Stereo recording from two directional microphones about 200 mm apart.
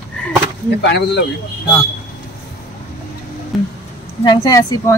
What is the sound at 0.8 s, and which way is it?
Speech, 60° left (ahead or behind).